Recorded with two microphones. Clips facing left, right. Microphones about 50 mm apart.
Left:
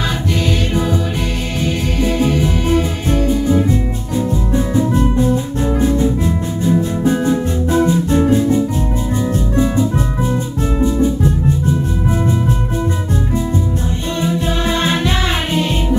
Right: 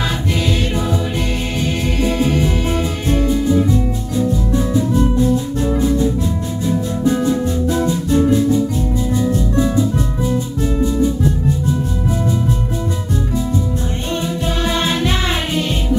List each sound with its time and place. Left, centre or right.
2.0 s music: centre
3.4 s music: left
4.9 s music: left
14.2 s music: left